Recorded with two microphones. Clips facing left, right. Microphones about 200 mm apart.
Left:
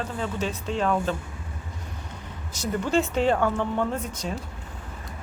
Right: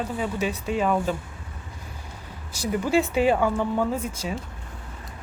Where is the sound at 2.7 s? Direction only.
10° right (ahead or behind).